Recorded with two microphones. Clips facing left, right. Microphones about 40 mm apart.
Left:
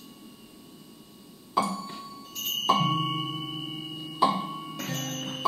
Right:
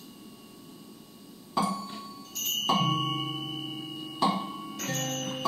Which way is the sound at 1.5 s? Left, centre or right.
Centre.